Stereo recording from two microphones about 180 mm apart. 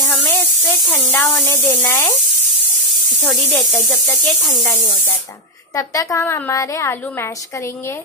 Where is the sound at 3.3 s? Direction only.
Centre (ahead or behind).